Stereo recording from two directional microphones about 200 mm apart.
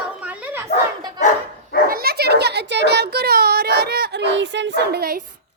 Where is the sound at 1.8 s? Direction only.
50° right (ahead or behind).